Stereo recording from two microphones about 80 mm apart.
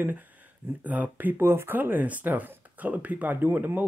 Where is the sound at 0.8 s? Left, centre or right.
Centre.